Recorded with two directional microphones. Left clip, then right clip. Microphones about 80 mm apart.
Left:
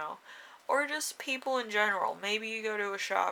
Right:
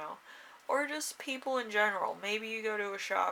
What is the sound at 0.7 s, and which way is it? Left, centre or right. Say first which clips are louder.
Speech: left 3 dB; left.